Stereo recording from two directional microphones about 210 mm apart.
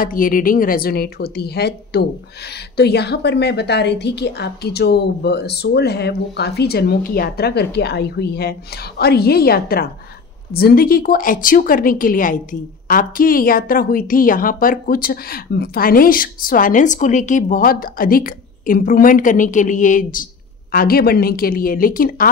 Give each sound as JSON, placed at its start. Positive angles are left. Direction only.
{"t": 0.0, "sound": "a woman's voice", "side_deg": 40}